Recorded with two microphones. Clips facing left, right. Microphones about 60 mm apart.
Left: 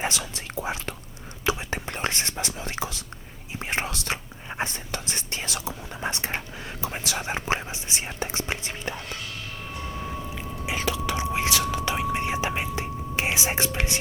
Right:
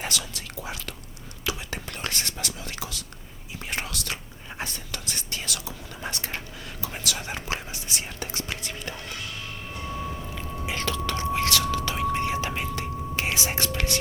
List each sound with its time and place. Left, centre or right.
0.0 s whispering: left
10.7 s whispering: centre